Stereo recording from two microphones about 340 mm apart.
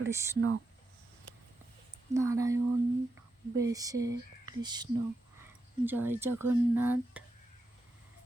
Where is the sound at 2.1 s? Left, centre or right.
Centre.